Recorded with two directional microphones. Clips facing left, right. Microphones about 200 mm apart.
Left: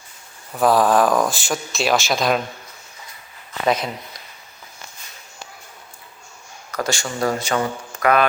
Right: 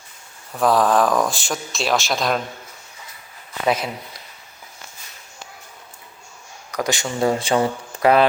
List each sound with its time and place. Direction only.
0.5 s speech: 5° left (ahead or behind)
3.7 s speech: 5° right (ahead or behind)
6.7 s speech: 15° right (ahead or behind)